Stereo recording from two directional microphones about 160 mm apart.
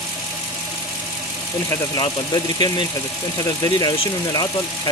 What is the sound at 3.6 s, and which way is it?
Speech, 25° left (ahead or behind).